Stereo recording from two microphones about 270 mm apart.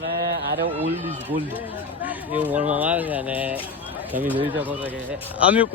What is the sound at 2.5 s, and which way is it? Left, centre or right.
A man's voice, centre.